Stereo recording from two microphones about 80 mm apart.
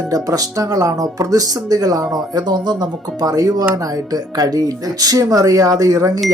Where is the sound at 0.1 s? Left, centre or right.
Right.